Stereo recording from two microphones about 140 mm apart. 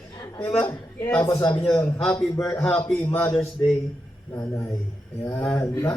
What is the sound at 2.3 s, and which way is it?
A man's voice, 25° left (ahead or behind).